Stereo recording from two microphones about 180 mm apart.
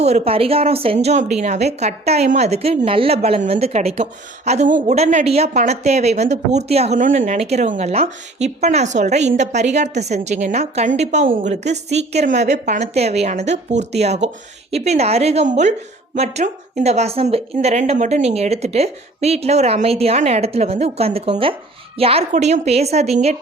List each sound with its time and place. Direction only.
0.0 s a woman's voice: 35° right (ahead or behind)